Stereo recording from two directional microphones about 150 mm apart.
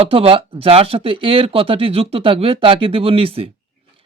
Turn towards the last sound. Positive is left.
turn(degrees=-40)  # may be behind; listen again after turning